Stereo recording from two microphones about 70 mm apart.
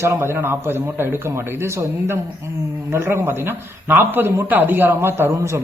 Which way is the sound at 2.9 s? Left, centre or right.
Right.